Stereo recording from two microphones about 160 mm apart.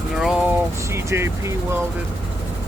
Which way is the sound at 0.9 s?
15° right (ahead or behind).